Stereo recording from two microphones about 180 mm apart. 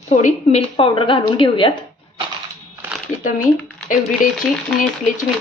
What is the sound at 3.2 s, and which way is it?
Speech, 45° left (ahead or behind).